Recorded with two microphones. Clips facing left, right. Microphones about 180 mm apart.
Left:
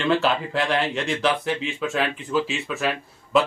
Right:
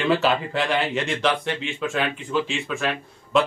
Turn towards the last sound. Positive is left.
turn(degrees=5)  # may be behind; listen again after turning